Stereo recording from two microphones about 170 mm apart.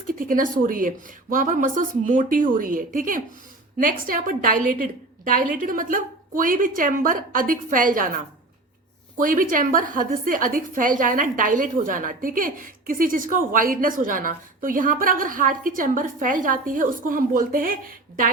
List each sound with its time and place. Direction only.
0.1 s a woman's voice: 55° right (ahead or behind)
9.1 s a woman's voice: 55° right (ahead or behind)